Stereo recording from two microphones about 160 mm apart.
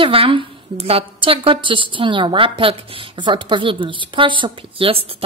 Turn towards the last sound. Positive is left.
turn(degrees=-35)  # may be behind; listen again after turning